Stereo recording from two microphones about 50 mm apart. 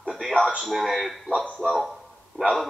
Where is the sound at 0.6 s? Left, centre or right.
Centre.